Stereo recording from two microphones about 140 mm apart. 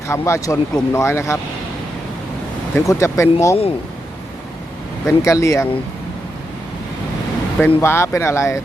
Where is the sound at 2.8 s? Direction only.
20° left (ahead or behind).